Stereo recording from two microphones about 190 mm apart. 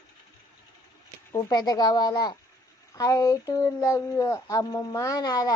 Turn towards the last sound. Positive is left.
turn(degrees=20)  # may be behind; listen again after turning